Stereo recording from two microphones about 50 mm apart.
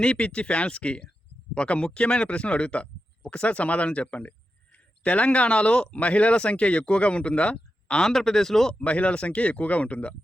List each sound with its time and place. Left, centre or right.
0.0 s speech: centre
8.0 s speech: centre
8.8 s speech: left